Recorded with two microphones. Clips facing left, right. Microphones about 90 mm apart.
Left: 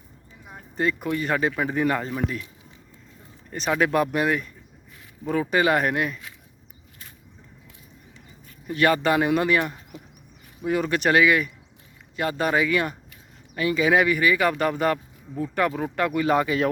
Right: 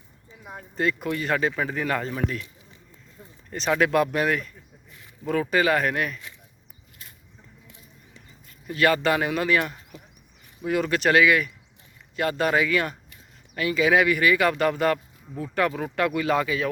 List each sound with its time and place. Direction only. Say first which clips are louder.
0.8 s speech: left 1 dB; 5° left (ahead or behind)
1.1 s speech: left 1 dB; 15° left (ahead or behind)
2.1 s speech: left 1 dB; 5° left (ahead or behind)
3.5 s speech: right 1 dB; 5° left (ahead or behind)
4.0 s speech: left 1 dB; 15° left (ahead or behind)
8.6 s speech: left 1 dB; 25° left (ahead or behind)
14.4 s speech: even; 10° left (ahead or behind)